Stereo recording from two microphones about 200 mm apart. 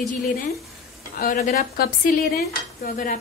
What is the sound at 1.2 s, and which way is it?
Speech, 40° left (ahead or behind).